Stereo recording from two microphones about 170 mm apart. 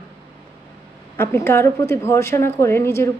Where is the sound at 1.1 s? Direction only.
15° left (ahead or behind).